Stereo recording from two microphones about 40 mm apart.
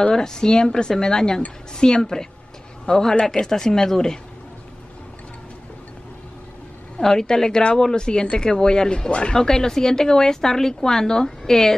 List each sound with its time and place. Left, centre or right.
0.0 s speech: centre
7.0 s speech: centre